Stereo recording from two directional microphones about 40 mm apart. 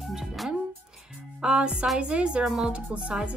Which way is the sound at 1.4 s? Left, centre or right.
Right.